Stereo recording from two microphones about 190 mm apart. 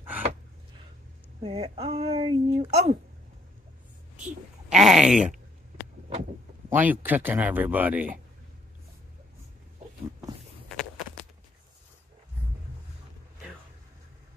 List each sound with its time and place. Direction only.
0.0 s a sound: 10° right (ahead or behind)
1.4 s speech: 30° right (ahead or behind)
4.2 s speech: 5° right (ahead or behind)
6.7 s speech: 10° right (ahead or behind)